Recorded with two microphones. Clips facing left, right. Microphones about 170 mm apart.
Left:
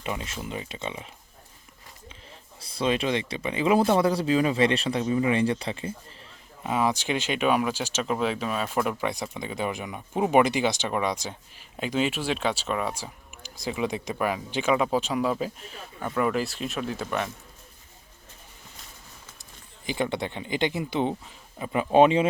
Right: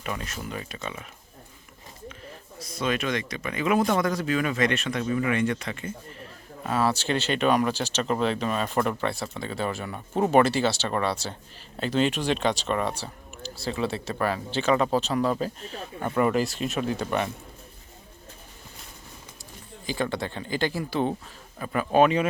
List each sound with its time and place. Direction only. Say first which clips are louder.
0.0 s speech: left 1 dB; 20° left (ahead or behind)
2.6 s speech: left 2 dB; 30° left (ahead or behind)
6.6 s speech: even; 15° left (ahead or behind)
16.0 s speech: right 2 dB; 5° right (ahead or behind)
19.8 s speech: left 1 dB; 20° left (ahead or behind)